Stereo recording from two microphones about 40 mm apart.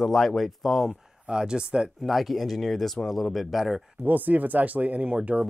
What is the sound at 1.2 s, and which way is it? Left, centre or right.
Speech, right.